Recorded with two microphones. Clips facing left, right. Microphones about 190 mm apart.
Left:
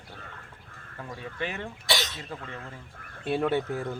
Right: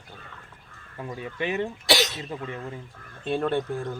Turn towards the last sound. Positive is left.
turn(degrees=5)  # may be behind; listen again after turning